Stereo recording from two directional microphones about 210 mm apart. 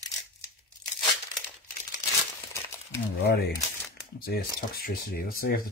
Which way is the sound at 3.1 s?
50° left (ahead or behind).